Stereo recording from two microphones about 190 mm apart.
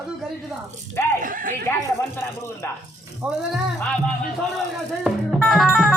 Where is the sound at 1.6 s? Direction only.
15° left (ahead or behind).